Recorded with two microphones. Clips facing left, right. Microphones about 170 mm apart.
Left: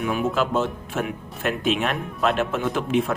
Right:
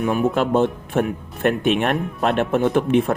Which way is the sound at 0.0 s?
45° right (ahead or behind).